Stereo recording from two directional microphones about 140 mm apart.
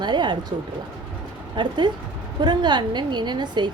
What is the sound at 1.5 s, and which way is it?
A woman's voice, 35° right (ahead or behind).